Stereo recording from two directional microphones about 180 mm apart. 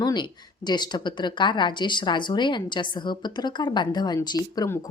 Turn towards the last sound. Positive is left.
turn(degrees=20)  # may be behind; listen again after turning